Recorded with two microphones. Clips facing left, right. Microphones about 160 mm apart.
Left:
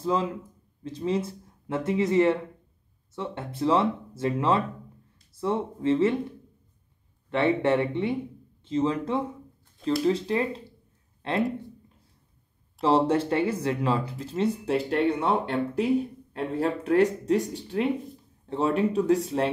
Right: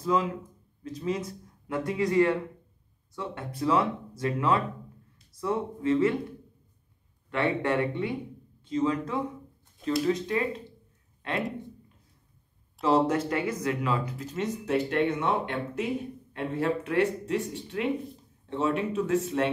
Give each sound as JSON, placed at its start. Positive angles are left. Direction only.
{"t": 0.0, "sound": "speech", "side_deg": 30}
{"t": 7.2, "sound": "speech", "side_deg": 25}
{"t": 12.8, "sound": "speech", "side_deg": 30}